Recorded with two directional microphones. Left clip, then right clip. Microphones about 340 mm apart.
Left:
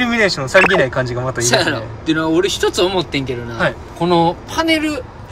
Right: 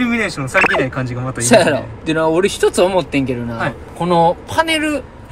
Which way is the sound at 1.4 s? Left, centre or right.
Centre.